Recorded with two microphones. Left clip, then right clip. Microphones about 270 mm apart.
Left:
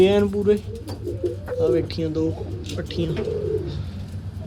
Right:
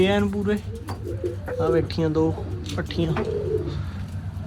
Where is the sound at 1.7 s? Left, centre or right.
Centre.